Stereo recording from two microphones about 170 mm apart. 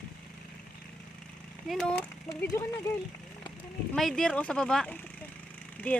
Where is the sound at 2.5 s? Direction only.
15° left (ahead or behind).